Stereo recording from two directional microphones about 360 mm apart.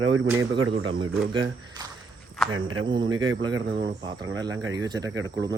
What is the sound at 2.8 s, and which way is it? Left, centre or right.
Speech, centre.